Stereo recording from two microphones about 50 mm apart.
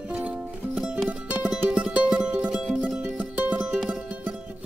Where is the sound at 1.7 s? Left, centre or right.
Centre.